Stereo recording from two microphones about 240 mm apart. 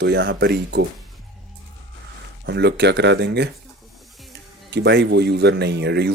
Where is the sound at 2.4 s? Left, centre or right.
Right.